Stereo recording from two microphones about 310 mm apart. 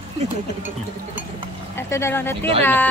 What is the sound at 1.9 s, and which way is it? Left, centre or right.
Speech, centre.